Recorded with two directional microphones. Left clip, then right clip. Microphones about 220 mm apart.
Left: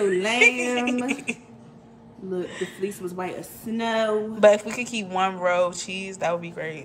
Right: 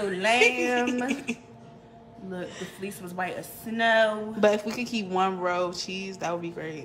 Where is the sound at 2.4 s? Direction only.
15° right (ahead or behind).